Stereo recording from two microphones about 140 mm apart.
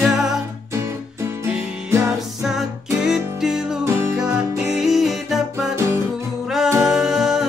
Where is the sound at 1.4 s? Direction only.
15° right (ahead or behind).